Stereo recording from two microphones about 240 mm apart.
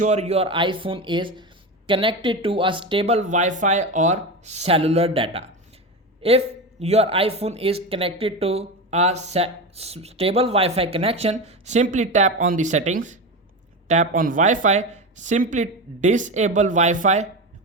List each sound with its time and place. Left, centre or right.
0.0 s speech: right